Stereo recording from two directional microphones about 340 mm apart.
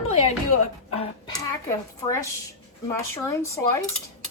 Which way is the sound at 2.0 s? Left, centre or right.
Centre.